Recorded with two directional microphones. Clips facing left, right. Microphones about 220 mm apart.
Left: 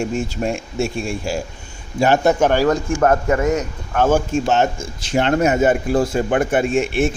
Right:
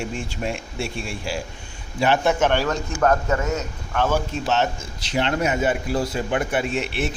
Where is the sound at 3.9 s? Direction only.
45° left (ahead or behind).